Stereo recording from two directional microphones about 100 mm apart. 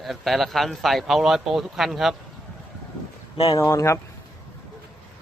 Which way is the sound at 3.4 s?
35° left (ahead or behind).